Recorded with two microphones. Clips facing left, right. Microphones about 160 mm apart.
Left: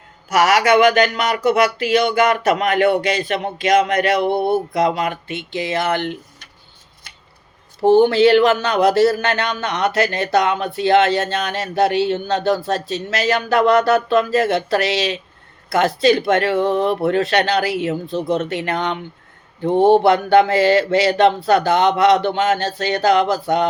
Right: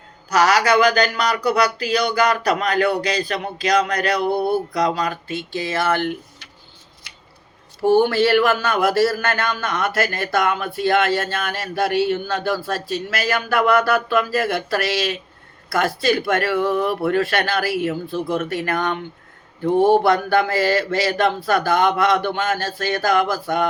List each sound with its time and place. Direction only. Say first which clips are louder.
0.3 s speech: left 2 dB; 25° left (ahead or behind)
7.8 s speech: left 4 dB; 25° left (ahead or behind)